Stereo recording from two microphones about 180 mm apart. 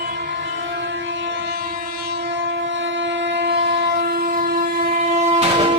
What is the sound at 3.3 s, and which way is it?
Train, 70° right (ahead or behind).